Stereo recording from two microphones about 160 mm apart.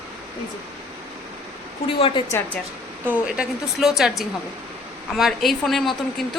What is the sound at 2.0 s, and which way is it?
Speech, 35° left (ahead or behind).